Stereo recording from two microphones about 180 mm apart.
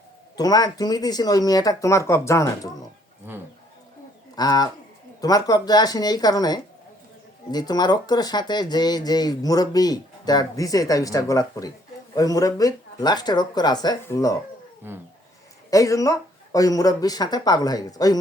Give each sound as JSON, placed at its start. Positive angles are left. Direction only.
{"t": 0.3, "sound": "speech", "side_deg": 20}
{"t": 3.3, "sound": "speech", "side_deg": -10}
{"t": 4.4, "sound": "speech", "side_deg": 20}
{"t": 14.8, "sound": "speech", "side_deg": -10}
{"t": 15.7, "sound": "speech", "side_deg": 20}